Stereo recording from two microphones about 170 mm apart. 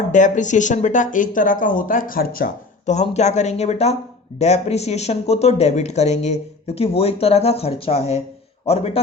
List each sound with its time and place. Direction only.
0.1 s speech: 45° left (ahead or behind)